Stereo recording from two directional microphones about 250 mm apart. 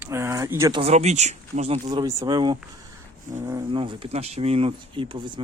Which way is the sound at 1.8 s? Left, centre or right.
Centre.